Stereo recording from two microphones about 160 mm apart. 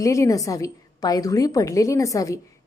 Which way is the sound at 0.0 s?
20° left (ahead or behind).